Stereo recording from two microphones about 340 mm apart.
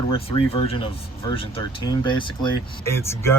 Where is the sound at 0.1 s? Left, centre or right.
Centre.